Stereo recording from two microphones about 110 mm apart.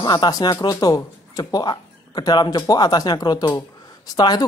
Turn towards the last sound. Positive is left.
turn(degrees=40)  # may be behind; listen again after turning